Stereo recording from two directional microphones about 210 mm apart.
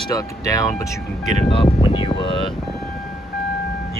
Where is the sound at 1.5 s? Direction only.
25° left (ahead or behind).